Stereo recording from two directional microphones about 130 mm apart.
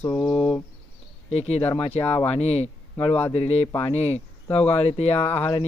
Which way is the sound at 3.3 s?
55° left (ahead or behind).